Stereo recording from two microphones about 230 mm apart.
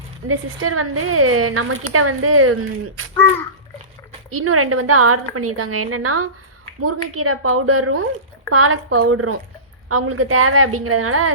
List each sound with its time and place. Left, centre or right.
0.3 s a woman's voice: right
4.3 s a woman's voice: right